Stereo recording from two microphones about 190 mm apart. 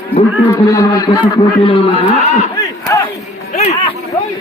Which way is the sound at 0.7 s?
20° left (ahead or behind).